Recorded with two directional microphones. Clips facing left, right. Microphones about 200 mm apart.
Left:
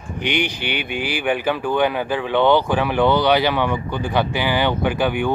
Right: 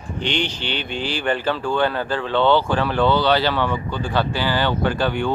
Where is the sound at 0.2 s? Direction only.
15° left (ahead or behind).